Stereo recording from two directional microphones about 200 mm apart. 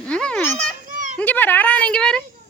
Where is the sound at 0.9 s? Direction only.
40° right (ahead or behind).